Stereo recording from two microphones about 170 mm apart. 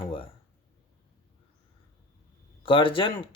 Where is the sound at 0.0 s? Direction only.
35° left (ahead or behind).